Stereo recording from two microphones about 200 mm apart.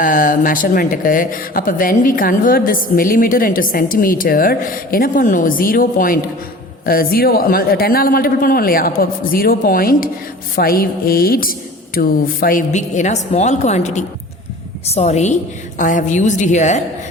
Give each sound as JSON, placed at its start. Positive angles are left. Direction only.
{"t": 0.0, "sound": "a woman's voice", "side_deg": 45}